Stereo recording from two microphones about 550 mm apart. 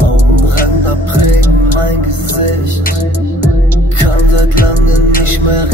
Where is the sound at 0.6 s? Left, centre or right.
Right.